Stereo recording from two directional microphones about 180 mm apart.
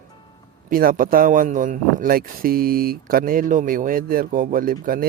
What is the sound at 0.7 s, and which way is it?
A man's voice, 50° right (ahead or behind).